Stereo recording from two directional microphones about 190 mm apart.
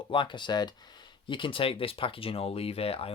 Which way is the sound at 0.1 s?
25° left (ahead or behind).